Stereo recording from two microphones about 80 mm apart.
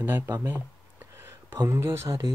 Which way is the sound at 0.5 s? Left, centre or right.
Right.